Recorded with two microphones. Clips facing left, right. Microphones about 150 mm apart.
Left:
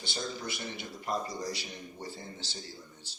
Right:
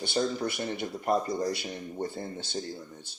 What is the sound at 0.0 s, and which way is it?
Speech, 55° right (ahead or behind).